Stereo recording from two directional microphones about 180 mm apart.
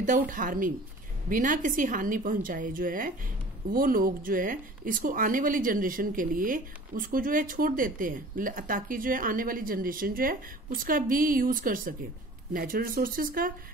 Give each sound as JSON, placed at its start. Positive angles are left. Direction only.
{"t": 0.0, "sound": "speech", "side_deg": -50}